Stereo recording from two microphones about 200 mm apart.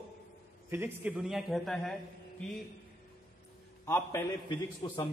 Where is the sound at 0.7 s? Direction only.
10° right (ahead or behind).